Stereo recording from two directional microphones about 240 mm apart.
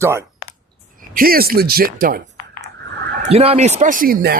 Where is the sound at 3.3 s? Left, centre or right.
Right.